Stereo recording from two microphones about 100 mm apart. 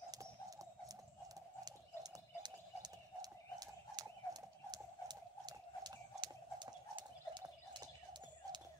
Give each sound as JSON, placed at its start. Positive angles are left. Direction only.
{"t": 2.4, "sound": "horse", "side_deg": -45}